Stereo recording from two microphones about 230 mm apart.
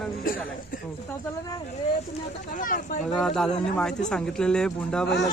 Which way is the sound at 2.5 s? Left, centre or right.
Left.